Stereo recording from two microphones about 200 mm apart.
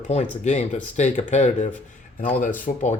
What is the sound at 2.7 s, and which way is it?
Speech, 40° left (ahead or behind).